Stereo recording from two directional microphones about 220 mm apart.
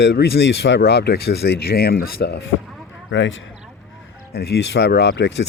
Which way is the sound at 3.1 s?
60° left (ahead or behind).